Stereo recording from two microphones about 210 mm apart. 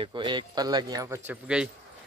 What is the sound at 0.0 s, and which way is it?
Speech, 20° right (ahead or behind).